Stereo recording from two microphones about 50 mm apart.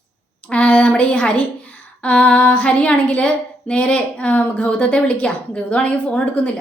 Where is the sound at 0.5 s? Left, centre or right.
Left.